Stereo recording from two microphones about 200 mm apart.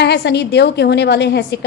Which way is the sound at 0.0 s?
55° left (ahead or behind).